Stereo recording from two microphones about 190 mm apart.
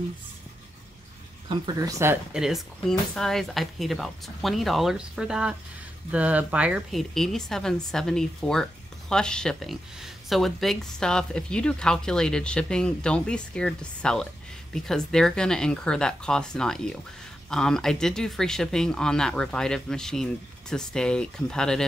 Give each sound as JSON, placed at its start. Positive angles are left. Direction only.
{"t": 1.5, "sound": "speech", "side_deg": -20}
{"t": 2.3, "sound": "speech", "side_deg": 0}